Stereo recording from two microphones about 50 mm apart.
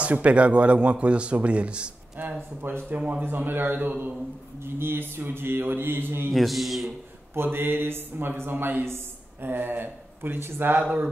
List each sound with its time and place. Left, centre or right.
0.0 s speech: right
2.2 s a man's voice: right
4.6 s a man's voice: right
6.3 s a man's voice: centre
7.3 s a man's voice: right
10.8 s speech: right